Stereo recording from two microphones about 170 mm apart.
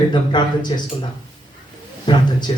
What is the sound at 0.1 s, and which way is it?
Speech, 25° left (ahead or behind).